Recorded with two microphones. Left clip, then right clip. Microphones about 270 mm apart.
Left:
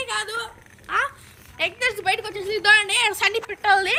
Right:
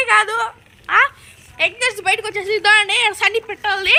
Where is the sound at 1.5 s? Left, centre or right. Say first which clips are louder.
Right 5 dB; centre.